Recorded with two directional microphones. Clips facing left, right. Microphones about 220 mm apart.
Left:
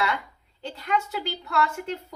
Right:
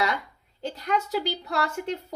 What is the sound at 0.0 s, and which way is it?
A woman's voice, 40° right (ahead or behind).